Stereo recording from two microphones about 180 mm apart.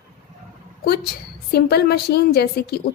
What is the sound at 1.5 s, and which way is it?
A woman's voice, 60° left (ahead or behind).